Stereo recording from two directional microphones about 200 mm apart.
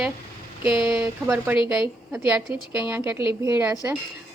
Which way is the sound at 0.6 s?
25° left (ahead or behind).